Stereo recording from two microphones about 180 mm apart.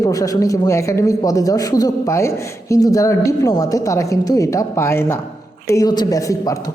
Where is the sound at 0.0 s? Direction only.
20° left (ahead or behind).